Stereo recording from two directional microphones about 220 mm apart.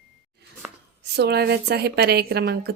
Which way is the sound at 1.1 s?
50° right (ahead or behind).